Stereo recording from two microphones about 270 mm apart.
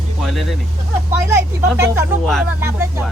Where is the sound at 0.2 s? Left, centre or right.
Centre.